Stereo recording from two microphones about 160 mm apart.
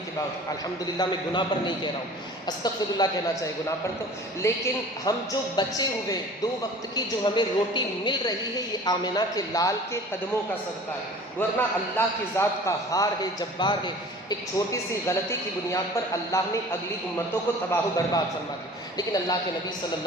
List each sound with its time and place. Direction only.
0.9 s a woman's voice: 30° left (ahead or behind)
3.0 s a woman's voice: 20° left (ahead or behind)
11.3 s a man's voice: 10° left (ahead or behind)
17.7 s a woman's voice: 20° left (ahead or behind)